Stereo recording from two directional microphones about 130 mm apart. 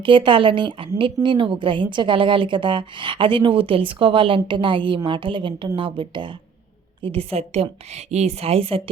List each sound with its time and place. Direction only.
0.0 s a woman's voice: 40° right (ahead or behind)